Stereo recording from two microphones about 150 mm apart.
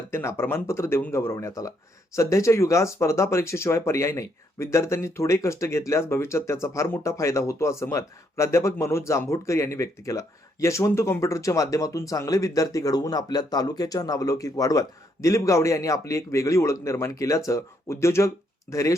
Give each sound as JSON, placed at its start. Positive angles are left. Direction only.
{"t": 0.1, "sound": "speech", "side_deg": 15}